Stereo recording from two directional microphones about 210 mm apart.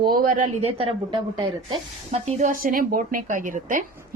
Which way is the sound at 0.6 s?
25° right (ahead or behind).